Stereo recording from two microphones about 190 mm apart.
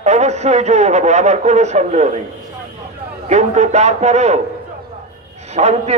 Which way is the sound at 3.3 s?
35° right (ahead or behind).